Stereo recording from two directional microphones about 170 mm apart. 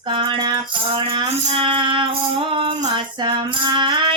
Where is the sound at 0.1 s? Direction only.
30° right (ahead or behind).